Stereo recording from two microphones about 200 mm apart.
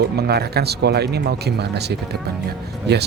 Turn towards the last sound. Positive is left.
turn(degrees=-55)  # may be behind; listen again after turning